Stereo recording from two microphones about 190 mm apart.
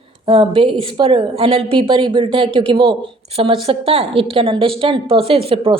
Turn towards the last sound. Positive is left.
turn(degrees=-30)  # may be behind; listen again after turning